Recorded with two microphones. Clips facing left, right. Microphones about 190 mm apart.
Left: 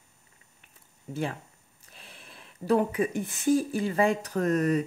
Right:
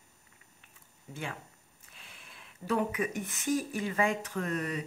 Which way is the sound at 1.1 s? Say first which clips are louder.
Left 8 dB; 35° left (ahead or behind).